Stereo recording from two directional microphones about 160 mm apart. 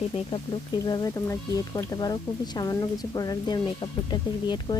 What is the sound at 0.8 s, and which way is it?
Speech, 25° left (ahead or behind).